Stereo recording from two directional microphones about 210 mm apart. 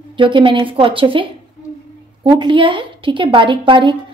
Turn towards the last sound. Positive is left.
turn(degrees=-25)  # may be behind; listen again after turning